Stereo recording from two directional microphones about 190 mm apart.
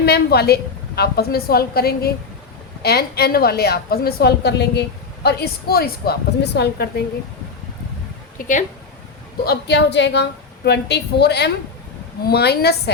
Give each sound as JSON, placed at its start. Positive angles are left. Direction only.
{"t": 0.0, "sound": "a woman's voice", "side_deg": 60}
{"t": 8.4, "sound": "a woman's voice", "side_deg": 40}
{"t": 9.4, "sound": "a woman's voice", "side_deg": 60}